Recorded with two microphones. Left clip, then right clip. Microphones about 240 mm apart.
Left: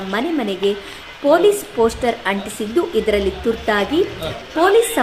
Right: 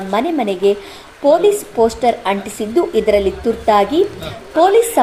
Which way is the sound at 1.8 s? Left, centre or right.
Centre.